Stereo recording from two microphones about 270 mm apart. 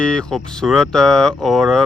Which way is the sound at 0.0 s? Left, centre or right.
Centre.